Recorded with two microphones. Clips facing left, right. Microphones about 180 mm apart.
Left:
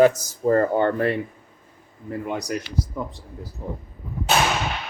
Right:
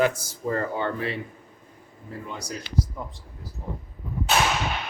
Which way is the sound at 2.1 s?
65° left (ahead or behind).